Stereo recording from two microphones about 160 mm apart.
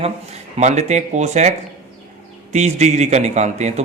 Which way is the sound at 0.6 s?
45° right (ahead or behind).